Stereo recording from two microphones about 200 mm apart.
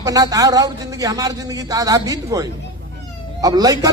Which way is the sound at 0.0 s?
20° right (ahead or behind).